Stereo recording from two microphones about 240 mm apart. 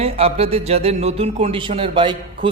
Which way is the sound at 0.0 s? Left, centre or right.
Right.